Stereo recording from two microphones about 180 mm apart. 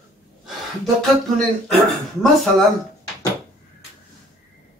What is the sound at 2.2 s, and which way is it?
Speech, centre (ahead or behind).